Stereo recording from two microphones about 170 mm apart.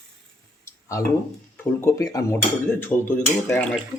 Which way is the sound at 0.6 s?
20° left (ahead or behind).